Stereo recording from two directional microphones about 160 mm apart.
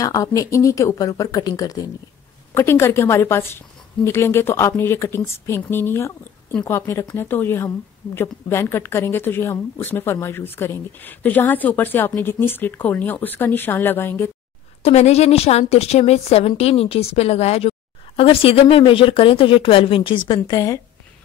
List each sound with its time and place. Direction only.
0.0 s speech: 20° left (ahead or behind)
14.8 s a woman's voice: 40° left (ahead or behind); by 20.8 s 20° left (ahead or behind)